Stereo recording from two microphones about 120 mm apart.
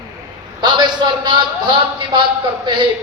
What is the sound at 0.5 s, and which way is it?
A man's voice, 40° right (ahead or behind).